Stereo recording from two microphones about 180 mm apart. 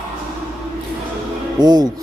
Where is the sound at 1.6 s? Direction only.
25° right (ahead or behind).